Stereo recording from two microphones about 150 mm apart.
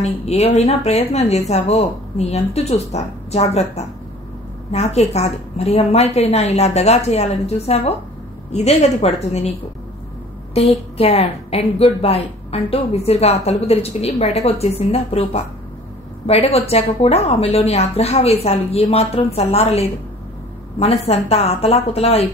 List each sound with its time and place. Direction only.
0.0 s a woman's voice: 45° left (ahead or behind)